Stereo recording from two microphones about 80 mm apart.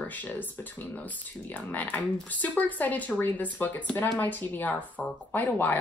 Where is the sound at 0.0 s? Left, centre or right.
Left.